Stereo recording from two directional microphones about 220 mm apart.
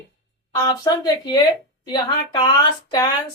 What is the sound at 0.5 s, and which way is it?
Speech, 15° left (ahead or behind).